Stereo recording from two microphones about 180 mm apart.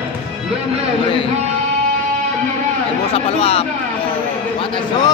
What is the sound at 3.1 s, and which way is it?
Speech, 35° left (ahead or behind).